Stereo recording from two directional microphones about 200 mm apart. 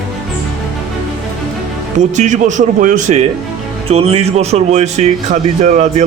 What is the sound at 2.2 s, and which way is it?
Speech, 40° right (ahead or behind).